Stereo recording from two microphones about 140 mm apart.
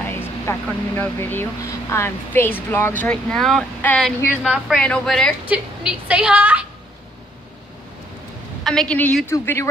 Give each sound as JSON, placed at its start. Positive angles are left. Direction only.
{"t": 0.0, "sound": "vehicle", "side_deg": 15}
{"t": 0.7, "sound": "speech", "side_deg": 10}
{"t": 4.4, "sound": "a woman's voice", "side_deg": 0}
{"t": 5.4, "sound": "a woman's voice", "side_deg": -10}
{"t": 8.6, "sound": "speech", "side_deg": 5}